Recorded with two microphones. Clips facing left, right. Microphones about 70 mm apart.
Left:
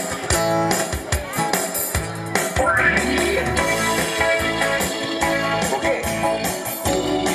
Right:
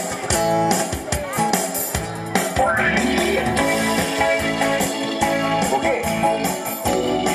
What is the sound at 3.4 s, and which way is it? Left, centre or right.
Music, centre.